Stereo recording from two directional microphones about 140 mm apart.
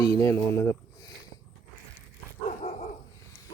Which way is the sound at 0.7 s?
25° left (ahead or behind).